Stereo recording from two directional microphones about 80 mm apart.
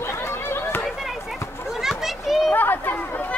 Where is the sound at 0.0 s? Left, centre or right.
Left.